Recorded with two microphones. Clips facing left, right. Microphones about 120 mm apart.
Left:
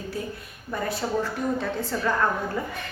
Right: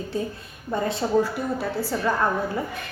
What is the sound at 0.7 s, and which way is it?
Speech, 25° right (ahead or behind).